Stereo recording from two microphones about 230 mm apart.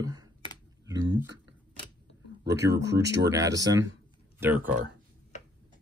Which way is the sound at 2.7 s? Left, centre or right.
Right.